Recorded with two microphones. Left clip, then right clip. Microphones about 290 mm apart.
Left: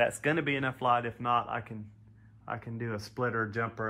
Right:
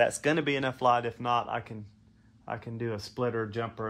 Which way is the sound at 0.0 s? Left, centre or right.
Right.